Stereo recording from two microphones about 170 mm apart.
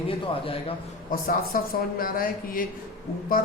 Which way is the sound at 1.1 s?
60° left (ahead or behind).